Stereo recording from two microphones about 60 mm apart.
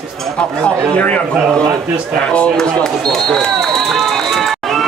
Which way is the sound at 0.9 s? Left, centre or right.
Left.